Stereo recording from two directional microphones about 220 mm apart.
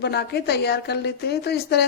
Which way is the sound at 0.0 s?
50° left (ahead or behind).